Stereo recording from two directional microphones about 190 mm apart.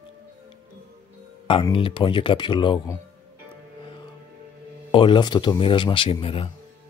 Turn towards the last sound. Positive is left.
turn(degrees=30)  # may be behind; listen again after turning